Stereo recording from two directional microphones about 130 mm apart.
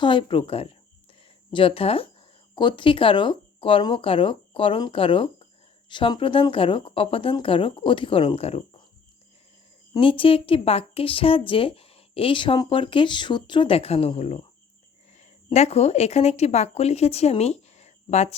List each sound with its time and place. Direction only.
0.0 s speech: 40° left (ahead or behind)
10.0 s speech: 45° left (ahead or behind)
15.5 s speech: 55° left (ahead or behind)